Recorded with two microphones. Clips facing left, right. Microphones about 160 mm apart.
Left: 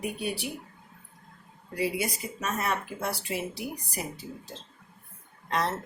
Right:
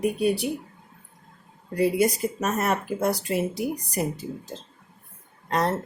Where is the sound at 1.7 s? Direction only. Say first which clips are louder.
Right 8 dB; 45° right (ahead or behind).